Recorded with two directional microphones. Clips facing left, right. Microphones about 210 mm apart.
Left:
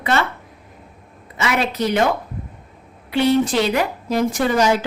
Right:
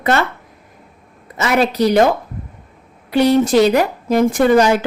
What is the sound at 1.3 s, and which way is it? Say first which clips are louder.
Speech: right 5 dB; 40° right (ahead or behind).